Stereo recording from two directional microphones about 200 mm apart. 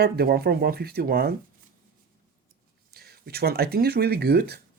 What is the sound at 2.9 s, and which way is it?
Speech, 50° right (ahead or behind).